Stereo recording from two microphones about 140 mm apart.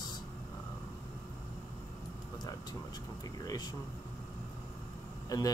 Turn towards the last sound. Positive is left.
turn(degrees=25)  # may be behind; listen again after turning